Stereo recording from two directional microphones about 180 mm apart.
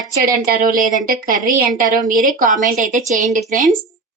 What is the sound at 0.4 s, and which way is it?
Speech, 50° right (ahead or behind).